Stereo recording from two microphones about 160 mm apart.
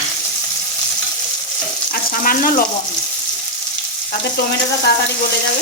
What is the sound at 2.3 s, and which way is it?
Frying, 60° left (ahead or behind).